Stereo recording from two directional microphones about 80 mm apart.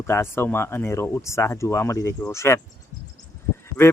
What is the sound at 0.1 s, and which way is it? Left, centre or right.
Speech, left.